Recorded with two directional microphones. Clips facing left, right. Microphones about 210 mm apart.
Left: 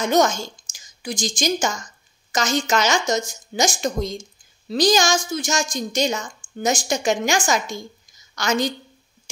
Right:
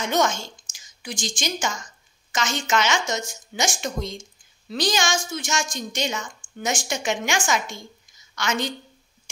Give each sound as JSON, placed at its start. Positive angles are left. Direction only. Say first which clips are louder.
{"t": 0.0, "sound": "a woman's voice", "louder": "left 4 dB", "side_deg": 40}